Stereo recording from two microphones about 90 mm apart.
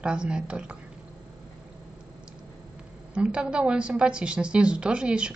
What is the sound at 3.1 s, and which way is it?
A woman's voice, 10° right (ahead or behind).